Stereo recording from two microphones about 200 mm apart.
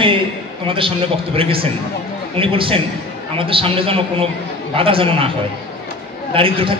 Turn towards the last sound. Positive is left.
turn(degrees=-25)  # may be behind; listen again after turning